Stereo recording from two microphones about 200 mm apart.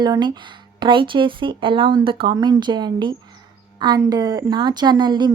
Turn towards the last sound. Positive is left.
turn(degrees=-20)  # may be behind; listen again after turning